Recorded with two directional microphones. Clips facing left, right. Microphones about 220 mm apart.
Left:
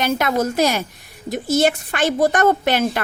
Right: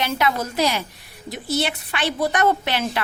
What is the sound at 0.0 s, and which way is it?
A woman's voice, 45° left (ahead or behind).